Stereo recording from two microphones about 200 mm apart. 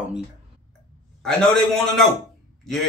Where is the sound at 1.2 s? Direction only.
Centre (ahead or behind).